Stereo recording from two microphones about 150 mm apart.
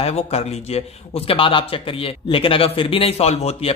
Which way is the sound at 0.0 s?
45° left (ahead or behind).